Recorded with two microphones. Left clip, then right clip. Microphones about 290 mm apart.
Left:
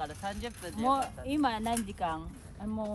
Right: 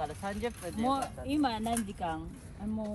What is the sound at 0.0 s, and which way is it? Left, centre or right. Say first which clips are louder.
Vehicle: right 1 dB; right.